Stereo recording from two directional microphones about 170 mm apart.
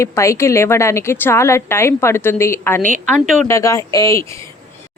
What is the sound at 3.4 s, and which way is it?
Speech, 15° left (ahead or behind).